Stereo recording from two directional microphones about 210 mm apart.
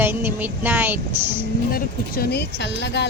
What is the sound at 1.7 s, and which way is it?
Speech, 45° left (ahead or behind).